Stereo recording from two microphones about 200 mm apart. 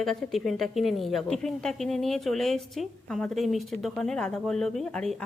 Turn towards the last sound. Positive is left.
turn(degrees=5)  # may be behind; listen again after turning